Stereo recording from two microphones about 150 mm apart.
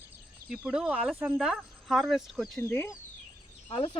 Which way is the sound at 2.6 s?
15° left (ahead or behind).